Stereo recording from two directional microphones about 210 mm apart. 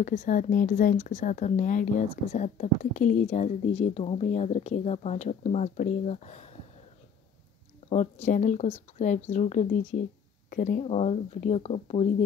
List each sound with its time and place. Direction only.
0.0 s speech: 35° left (ahead or behind)
7.9 s speech: 30° left (ahead or behind)